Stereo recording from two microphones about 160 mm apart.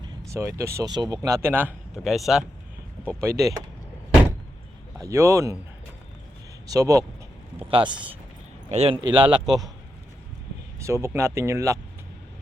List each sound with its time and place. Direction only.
0.0 s vehicle: 20° right (ahead or behind)
0.8 s speech: 25° right (ahead or behind); by 2.4 s centre (ahead or behind)
3.2 s a man's voice: 20° right (ahead or behind)
4.9 s a man's voice: 20° right (ahead or behind)
6.7 s a man's voice: 20° right (ahead or behind)
8.7 s speech: 40° right (ahead or behind)
9.0 s a man's voice: 30° right (ahead or behind)
10.8 s speech: 20° right (ahead or behind)